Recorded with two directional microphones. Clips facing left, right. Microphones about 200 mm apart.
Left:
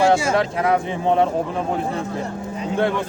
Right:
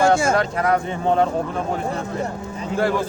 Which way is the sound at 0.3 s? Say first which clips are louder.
Left 1 dB; centre (ahead or behind).